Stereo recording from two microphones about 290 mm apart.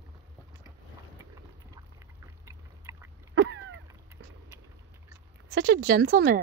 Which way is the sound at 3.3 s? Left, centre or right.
Right.